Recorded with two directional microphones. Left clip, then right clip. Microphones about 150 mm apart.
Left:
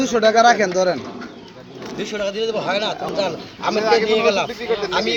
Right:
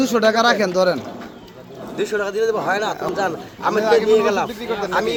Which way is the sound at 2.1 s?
60° right (ahead or behind).